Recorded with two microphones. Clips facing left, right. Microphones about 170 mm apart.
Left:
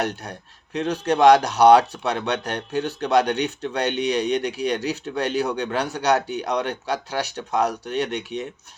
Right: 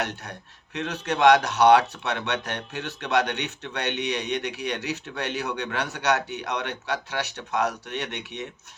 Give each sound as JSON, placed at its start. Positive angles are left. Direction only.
{"t": 0.0, "sound": "speech", "side_deg": 35}